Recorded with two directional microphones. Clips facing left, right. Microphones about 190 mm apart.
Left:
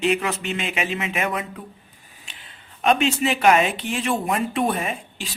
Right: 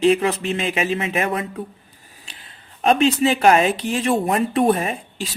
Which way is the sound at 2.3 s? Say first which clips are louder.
Right 2 dB; 35° right (ahead or behind).